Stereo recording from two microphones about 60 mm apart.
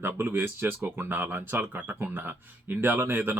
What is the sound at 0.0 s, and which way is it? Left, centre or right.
Speech, right.